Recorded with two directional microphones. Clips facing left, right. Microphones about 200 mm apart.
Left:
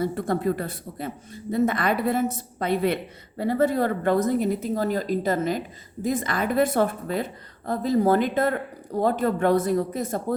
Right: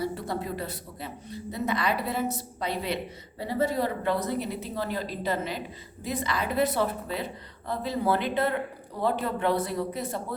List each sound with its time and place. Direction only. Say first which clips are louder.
0.0 s speech: left 7 dB; 50° left (ahead or behind)